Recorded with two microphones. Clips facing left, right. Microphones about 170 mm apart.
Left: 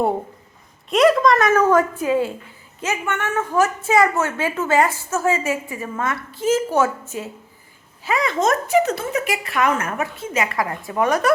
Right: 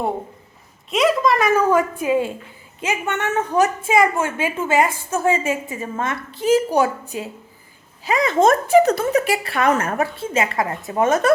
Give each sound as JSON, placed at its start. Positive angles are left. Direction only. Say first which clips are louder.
{"t": 0.9, "sound": "a woman's voice", "louder": "left 3 dB", "side_deg": 0}
{"t": 5.2, "sound": "a woman's voice", "louder": "right 1 dB", "side_deg": -25}
{"t": 8.4, "sound": "a woman's voice", "louder": "right 5 dB", "side_deg": -30}